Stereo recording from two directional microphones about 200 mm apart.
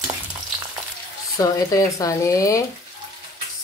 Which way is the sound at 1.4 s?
15° left (ahead or behind).